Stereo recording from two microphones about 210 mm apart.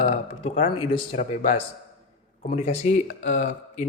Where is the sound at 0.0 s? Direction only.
30° left (ahead or behind).